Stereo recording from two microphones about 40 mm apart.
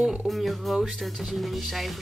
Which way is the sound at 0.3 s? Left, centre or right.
Centre.